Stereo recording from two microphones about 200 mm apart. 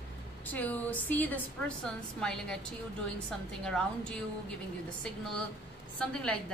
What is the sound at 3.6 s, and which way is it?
Speech, 5° left (ahead or behind).